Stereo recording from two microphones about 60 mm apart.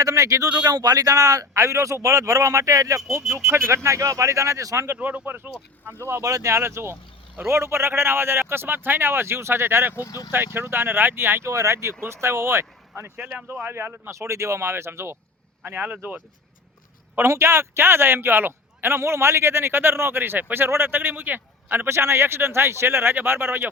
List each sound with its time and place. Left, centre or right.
0.0 s speech: right
0.7 s speech: right
3.4 s speech: right
3.8 s speech: right
4.9 s a man's voice: right
6.2 s speech: right
10.0 s speech: left
10.3 s a man's voice: right
11.5 s speech: right
13.0 s a man's voice: right
14.1 s speech: right
15.6 s a man's voice: right
17.2 s a man's voice: right